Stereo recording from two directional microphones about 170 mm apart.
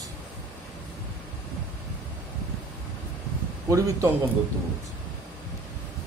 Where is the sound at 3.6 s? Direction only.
20° right (ahead or behind).